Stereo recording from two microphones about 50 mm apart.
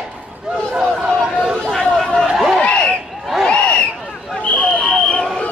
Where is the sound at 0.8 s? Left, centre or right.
Centre.